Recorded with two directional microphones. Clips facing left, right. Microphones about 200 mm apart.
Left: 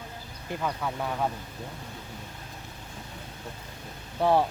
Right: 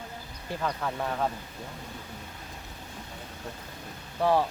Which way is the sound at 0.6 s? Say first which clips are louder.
Even; centre (ahead or behind).